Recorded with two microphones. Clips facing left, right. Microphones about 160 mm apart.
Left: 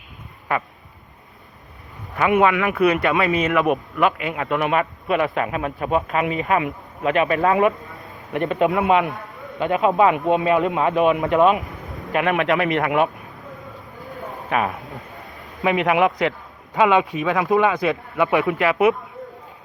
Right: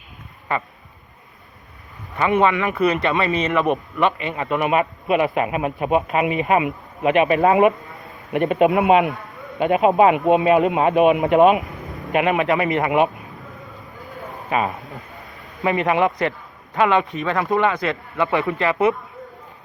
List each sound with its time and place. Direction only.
2.1 s speech: 5° left (ahead or behind); by 11.6 s 15° right (ahead or behind)
11.6 s vehicle: centre (ahead or behind)
12.3 s speech: 5° right (ahead or behind)
14.0 s a sound: centre (ahead or behind)
16.7 s a man's voice: 10° left (ahead or behind)